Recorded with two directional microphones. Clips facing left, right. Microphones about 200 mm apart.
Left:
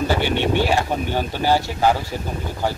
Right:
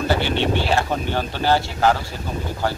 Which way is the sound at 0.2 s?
10° left (ahead or behind).